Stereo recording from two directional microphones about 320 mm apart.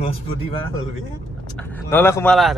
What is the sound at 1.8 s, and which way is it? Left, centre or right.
Speech, centre.